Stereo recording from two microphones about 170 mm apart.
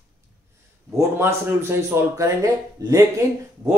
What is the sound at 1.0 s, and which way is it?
Speech, 15° right (ahead or behind).